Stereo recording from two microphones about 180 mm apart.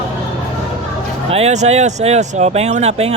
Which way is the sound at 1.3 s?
35° right (ahead or behind).